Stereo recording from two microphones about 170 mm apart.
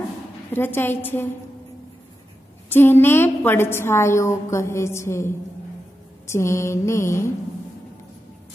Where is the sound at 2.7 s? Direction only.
10° left (ahead or behind).